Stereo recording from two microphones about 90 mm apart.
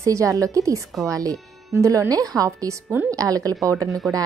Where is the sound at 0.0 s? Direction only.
35° right (ahead or behind).